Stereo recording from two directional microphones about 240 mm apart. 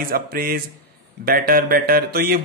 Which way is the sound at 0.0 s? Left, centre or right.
Right.